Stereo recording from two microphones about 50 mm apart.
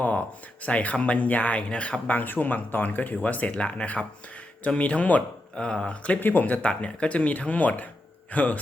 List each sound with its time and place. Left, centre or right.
0.6 s speech: left
5.5 s speech: centre
6.1 s a man's voice: left